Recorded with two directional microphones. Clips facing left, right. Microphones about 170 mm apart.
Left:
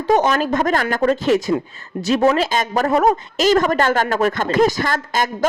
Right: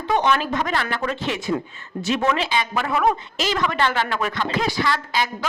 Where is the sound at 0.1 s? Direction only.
40° left (ahead or behind).